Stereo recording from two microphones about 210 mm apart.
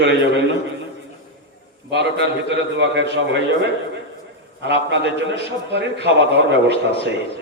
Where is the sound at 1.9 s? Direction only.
55° right (ahead or behind).